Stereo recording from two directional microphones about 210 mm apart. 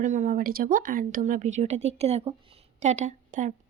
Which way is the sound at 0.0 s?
35° right (ahead or behind).